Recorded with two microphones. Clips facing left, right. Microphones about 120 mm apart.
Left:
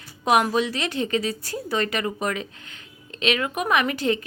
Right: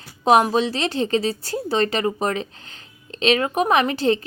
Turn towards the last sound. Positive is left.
turn(degrees=-30)  # may be behind; listen again after turning